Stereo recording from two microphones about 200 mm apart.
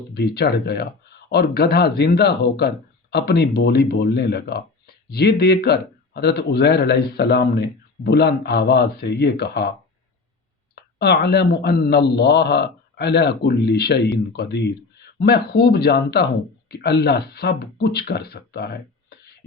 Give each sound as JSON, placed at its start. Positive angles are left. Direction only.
{"t": 0.1, "sound": "speech", "side_deg": 50}
{"t": 10.9, "sound": "speech", "side_deg": 55}